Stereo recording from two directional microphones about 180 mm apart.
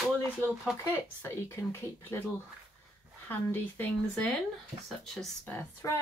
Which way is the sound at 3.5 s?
10° left (ahead or behind).